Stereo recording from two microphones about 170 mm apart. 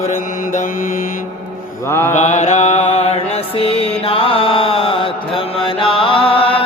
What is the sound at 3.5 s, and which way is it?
Music, 35° left (ahead or behind).